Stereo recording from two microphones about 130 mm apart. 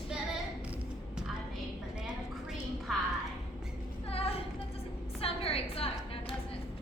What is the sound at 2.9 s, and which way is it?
Music, centre (ahead or behind).